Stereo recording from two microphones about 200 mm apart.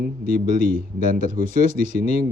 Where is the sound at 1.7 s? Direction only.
35° left (ahead or behind).